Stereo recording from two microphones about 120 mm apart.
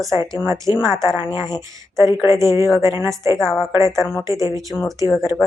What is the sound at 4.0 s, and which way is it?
Speech, 25° left (ahead or behind).